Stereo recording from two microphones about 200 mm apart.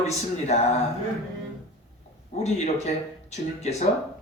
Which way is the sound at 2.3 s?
35° left (ahead or behind).